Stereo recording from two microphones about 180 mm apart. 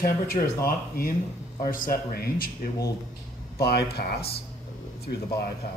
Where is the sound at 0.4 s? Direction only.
40° left (ahead or behind).